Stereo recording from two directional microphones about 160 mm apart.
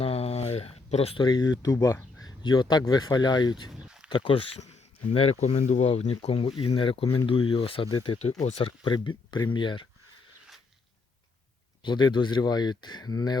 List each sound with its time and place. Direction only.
0.0 s speech: 40° left (ahead or behind)
3.7 s a sound: 5° right (ahead or behind)
4.1 s speech: 30° left (ahead or behind)
11.8 s speech: 30° left (ahead or behind)